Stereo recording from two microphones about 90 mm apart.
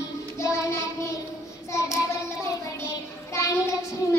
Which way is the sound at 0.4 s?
35° left (ahead or behind).